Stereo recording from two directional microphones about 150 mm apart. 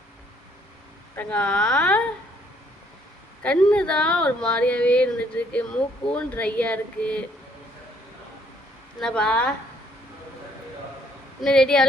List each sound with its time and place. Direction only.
1.1 s speech: 10° left (ahead or behind)
3.4 s speech: 5° left (ahead or behind)
9.0 s speech: 5° left (ahead or behind)
11.4 s speech: 5° left (ahead or behind)